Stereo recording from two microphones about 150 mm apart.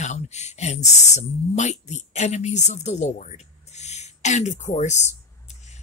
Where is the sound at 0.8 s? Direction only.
50° left (ahead or behind).